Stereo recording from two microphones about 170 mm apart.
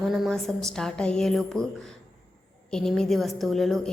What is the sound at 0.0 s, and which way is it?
A woman's voice, centre (ahead or behind).